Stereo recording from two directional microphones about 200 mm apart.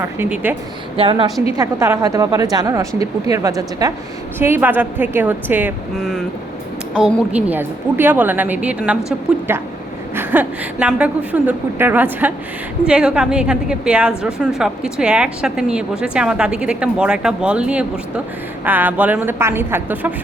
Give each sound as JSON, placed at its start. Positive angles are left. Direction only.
{"t": 0.0, "sound": "a woman's voice", "side_deg": -10}
{"t": 0.9, "sound": "a woman's voice", "side_deg": -25}
{"t": 1.5, "sound": "a woman's voice", "side_deg": -15}
{"t": 6.0, "sound": "a woman's voice", "side_deg": 0}